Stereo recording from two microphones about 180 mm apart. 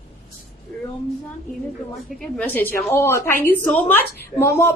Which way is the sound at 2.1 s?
5° left (ahead or behind).